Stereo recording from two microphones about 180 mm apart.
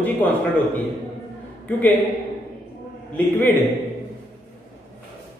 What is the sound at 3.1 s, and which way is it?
Speech, 10° left (ahead or behind).